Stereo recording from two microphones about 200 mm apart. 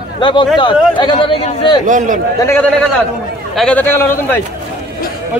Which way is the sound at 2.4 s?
15° left (ahead or behind).